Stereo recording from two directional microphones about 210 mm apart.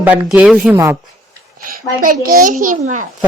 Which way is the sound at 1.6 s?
40° right (ahead or behind).